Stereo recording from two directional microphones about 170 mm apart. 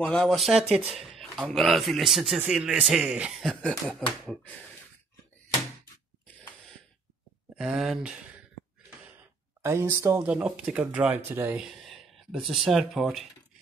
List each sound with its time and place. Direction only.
0.0 s a man's voice: 5° left (ahead or behind)
1.1 s a sound: centre (ahead or behind)
1.5 s a man's voice: centre (ahead or behind)
7.5 s a man's voice: 5° right (ahead or behind)
9.6 s speech: 15° right (ahead or behind)
10.3 s speech: 5° right (ahead or behind)
11.9 s speech: centre (ahead or behind)